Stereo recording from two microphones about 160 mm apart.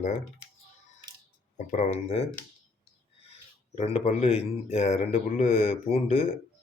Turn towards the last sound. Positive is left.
turn(degrees=40)  # may be behind; listen again after turning